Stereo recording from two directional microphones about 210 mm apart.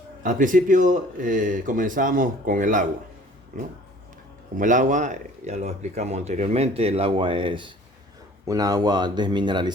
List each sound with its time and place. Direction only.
0.2 s speech: 40° right (ahead or behind)
4.5 s speech: 40° right (ahead or behind); by 9.7 s 20° right (ahead or behind)